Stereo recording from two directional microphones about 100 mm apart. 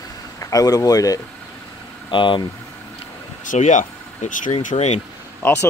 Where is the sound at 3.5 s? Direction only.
90° left.